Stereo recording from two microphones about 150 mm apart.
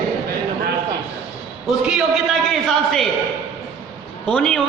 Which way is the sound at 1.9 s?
5° right (ahead or behind).